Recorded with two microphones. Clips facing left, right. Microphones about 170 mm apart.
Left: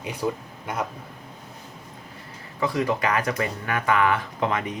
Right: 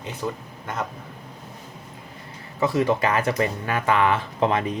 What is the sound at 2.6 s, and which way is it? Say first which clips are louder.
Speech: right 3 dB; 25° right (ahead or behind).